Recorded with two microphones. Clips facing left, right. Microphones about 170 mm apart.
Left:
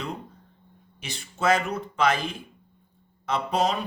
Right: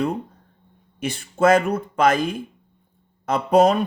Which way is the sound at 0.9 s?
50° right (ahead or behind).